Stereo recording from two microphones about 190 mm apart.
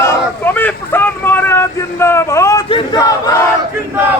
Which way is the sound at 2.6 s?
25° left (ahead or behind).